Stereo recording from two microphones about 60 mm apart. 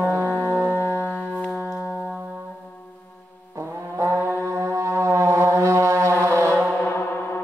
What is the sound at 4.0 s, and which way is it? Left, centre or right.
Music, right.